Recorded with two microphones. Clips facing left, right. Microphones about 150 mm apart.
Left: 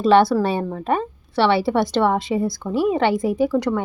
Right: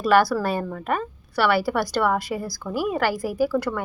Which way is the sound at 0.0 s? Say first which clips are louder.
Left 4 dB; 25° left (ahead or behind).